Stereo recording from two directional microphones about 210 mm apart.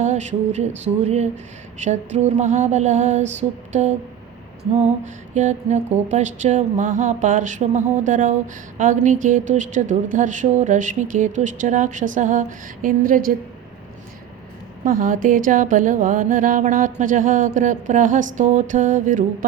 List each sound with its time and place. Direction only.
0.0 s a woman's voice: 35° right (ahead or behind)
14.8 s a woman's voice: 40° right (ahead or behind)